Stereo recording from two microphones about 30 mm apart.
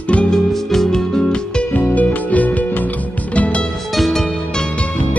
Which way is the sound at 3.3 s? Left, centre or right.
Left.